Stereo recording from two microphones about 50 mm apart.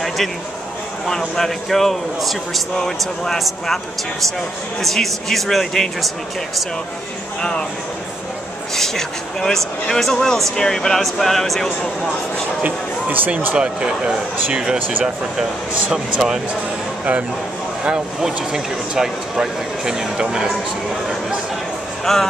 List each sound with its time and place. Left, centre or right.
1.0 s speech: centre
4.8 s speech: centre
8.7 s speech: centre
12.6 s speech: right
13.6 s speech: centre
15.9 s speech: centre
17.8 s speech: centre
22.0 s speech: centre